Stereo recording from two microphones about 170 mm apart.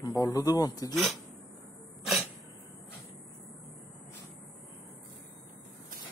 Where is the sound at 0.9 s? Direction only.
Centre (ahead or behind).